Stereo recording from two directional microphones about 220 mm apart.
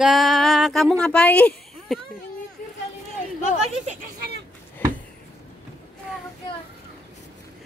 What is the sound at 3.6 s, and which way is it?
Speech, 30° right (ahead or behind).